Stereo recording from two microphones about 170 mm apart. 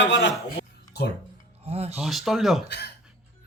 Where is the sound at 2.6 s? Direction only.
80° left.